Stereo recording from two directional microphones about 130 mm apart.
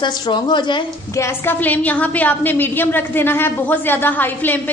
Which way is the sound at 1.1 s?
15° left (ahead or behind).